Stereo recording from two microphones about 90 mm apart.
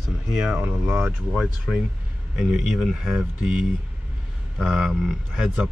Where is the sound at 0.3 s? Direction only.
5° right (ahead or behind).